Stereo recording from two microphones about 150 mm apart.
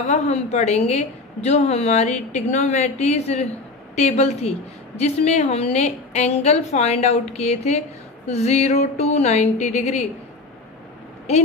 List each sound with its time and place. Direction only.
0.0 s a woman's voice: 50° left (ahead or behind)